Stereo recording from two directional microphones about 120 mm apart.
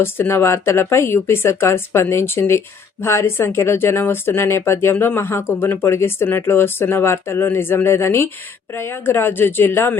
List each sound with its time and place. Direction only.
0.0 s speech: 20° left (ahead or behind)